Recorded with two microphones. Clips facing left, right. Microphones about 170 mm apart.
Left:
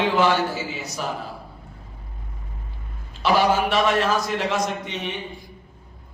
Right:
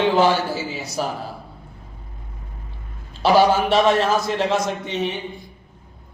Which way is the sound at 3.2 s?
30° right (ahead or behind).